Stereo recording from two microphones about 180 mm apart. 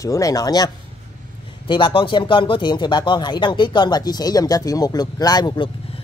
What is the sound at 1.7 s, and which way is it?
Speech, 25° left (ahead or behind).